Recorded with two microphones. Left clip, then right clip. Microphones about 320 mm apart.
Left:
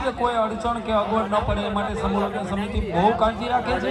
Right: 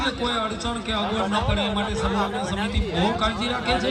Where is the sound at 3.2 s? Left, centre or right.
Centre.